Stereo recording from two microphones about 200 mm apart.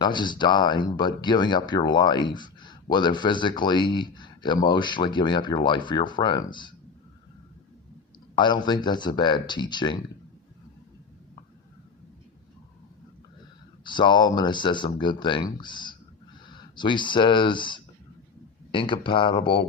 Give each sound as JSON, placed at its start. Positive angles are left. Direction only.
{"t": 0.0, "sound": "speech", "side_deg": 20}
{"t": 8.4, "sound": "speech", "side_deg": 20}
{"t": 13.8, "sound": "speech", "side_deg": 25}